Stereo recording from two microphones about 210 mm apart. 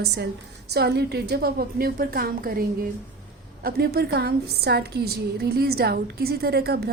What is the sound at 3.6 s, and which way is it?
A woman's voice, 50° right (ahead or behind).